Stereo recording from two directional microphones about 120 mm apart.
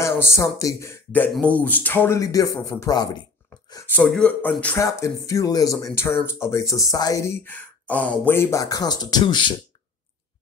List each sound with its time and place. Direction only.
0.0 s speech: 20° left (ahead or behind)
2.1 s speech: 30° left (ahead or behind)
3.8 s speech: 15° left (ahead or behind)
4.7 s speech: 25° left (ahead or behind); by 9.6 s 45° left (ahead or behind)